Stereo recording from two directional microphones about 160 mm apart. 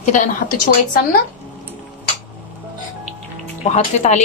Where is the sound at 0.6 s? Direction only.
65° left (ahead or behind).